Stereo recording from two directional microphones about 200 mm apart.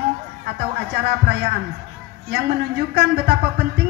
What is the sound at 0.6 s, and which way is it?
A man's voice, 50° right (ahead or behind).